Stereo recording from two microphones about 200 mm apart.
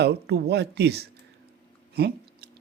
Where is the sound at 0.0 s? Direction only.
55° right (ahead or behind).